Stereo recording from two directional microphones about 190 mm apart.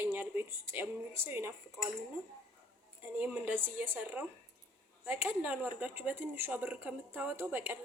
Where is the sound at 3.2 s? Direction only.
10° right (ahead or behind).